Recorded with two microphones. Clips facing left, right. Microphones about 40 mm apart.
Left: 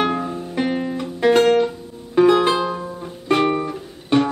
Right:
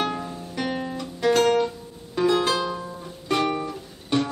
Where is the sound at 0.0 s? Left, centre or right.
Left.